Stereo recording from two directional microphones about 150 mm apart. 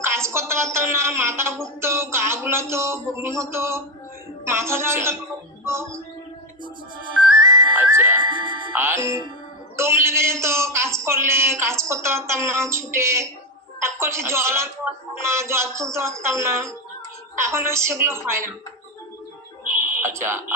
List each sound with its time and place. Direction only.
0.0 s a woman's voice: 15° right (ahead or behind)
5.6 s music: 20° right (ahead or behind)
7.8 s music: 10° right (ahead or behind)
8.2 s music: 30° right (ahead or behind)
8.7 s a man's voice: 15° right (ahead or behind)
20.0 s speech: 15° right (ahead or behind)